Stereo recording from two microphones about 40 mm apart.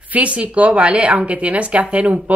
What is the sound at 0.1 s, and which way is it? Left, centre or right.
Speech, right.